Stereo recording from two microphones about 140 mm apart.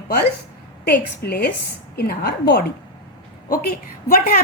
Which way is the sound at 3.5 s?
90° left.